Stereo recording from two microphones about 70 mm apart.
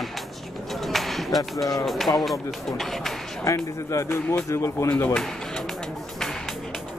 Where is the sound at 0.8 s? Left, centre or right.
Centre.